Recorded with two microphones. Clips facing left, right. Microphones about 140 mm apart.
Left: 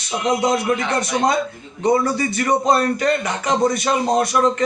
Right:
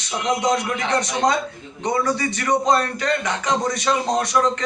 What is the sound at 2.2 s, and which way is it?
Speech, 5° left (ahead or behind).